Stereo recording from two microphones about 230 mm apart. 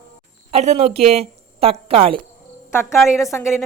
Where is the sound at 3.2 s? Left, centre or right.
Centre.